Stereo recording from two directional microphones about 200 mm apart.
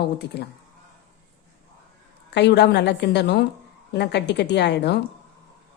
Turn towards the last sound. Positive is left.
turn(degrees=55)  # may be behind; listen again after turning